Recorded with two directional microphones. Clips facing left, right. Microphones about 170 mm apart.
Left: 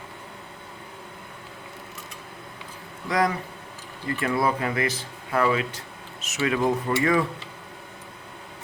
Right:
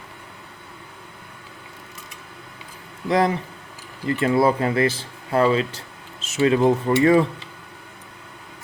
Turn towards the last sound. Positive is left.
turn(degrees=-30)  # may be behind; listen again after turning